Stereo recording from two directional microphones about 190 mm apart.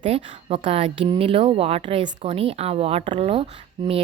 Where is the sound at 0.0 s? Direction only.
30° right (ahead or behind).